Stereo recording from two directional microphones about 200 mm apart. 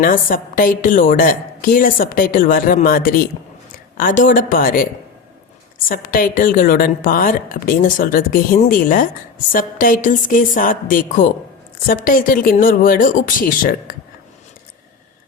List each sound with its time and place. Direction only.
0.0 s a woman's voice: 45° left (ahead or behind)
5.9 s a woman's voice: 45° left (ahead or behind)